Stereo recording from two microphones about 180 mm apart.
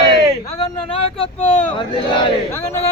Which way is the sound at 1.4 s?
5° left (ahead or behind).